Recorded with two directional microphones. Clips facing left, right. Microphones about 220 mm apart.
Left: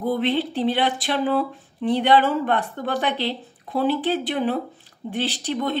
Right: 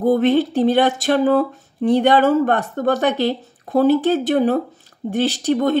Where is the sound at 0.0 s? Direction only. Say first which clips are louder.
Right 7 dB; 45° right (ahead or behind).